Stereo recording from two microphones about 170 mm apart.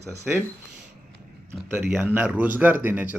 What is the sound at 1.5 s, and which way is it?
Speech, 15° right (ahead or behind).